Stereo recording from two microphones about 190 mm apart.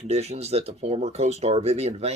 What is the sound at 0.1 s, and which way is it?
Speech, 35° right (ahead or behind).